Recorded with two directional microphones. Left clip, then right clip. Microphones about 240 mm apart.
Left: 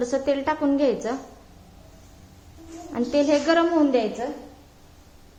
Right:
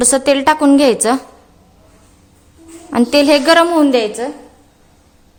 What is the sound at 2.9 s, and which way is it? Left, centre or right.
A woman's voice, right.